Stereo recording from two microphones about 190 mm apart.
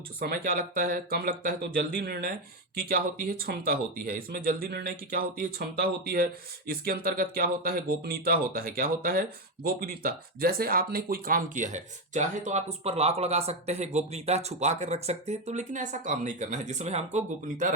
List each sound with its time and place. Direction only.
0.2 s speech: 50° right (ahead or behind)